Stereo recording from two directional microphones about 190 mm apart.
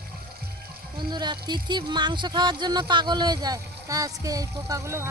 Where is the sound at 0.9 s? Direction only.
20° right (ahead or behind).